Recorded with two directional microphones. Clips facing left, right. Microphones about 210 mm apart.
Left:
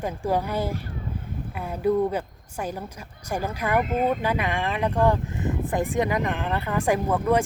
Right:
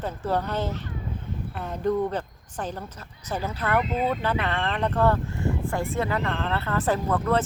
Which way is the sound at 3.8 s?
50° left (ahead or behind).